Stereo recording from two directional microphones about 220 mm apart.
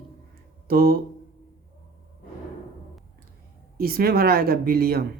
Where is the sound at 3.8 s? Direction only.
45° right (ahead or behind).